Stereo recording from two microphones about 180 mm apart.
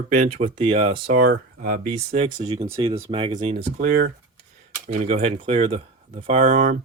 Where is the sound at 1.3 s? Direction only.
55° right (ahead or behind).